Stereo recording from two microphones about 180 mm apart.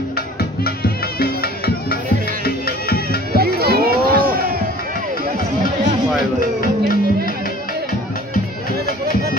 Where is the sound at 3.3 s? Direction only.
60° right (ahead or behind).